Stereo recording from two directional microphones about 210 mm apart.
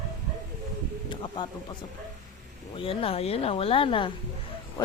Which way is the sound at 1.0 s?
25° left (ahead or behind).